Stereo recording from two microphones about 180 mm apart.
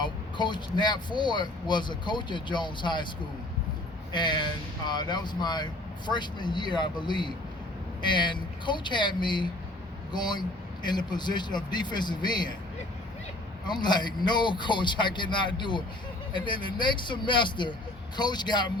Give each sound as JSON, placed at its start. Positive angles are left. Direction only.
{"t": 0.0, "sound": "speech", "side_deg": 25}
{"t": 4.1, "sound": "speech", "side_deg": 25}
{"t": 13.7, "sound": "speech", "side_deg": 25}